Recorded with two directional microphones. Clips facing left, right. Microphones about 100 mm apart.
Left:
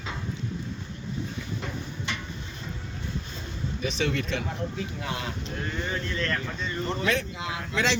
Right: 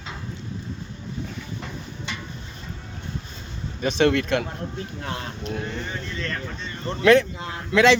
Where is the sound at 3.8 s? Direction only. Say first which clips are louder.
Right 9 dB; 65° right (ahead or behind).